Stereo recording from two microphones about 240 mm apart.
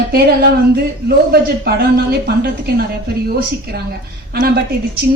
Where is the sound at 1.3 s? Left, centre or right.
Right.